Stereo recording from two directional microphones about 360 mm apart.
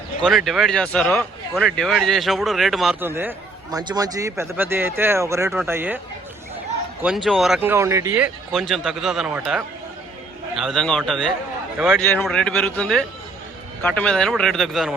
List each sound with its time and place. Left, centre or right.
0.3 s speech: centre
7.0 s speech: centre